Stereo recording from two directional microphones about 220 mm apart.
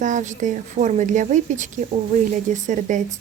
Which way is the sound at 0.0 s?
35° right (ahead or behind).